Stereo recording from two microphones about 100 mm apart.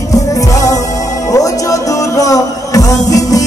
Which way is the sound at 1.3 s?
35° left (ahead or behind).